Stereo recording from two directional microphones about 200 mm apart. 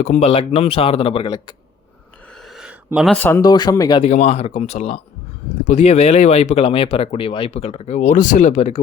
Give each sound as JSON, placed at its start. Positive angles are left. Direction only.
{"t": 0.0, "sound": "speech", "side_deg": 30}
{"t": 2.4, "sound": "a sound", "side_deg": 0}
{"t": 3.2, "sound": "speech", "side_deg": 10}
{"t": 4.0, "sound": "speech", "side_deg": 35}